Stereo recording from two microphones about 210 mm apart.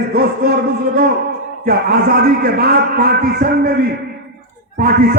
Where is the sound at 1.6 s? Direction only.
45° right (ahead or behind).